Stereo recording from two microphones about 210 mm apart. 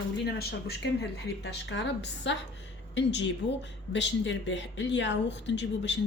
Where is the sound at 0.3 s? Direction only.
50° left (ahead or behind).